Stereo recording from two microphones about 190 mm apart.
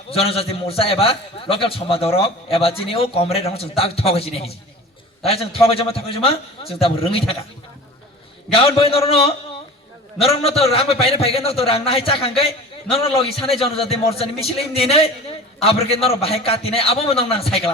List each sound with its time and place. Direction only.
0.1 s a man's voice: 30° left (ahead or behind)
8.5 s a man's voice: 30° left (ahead or behind)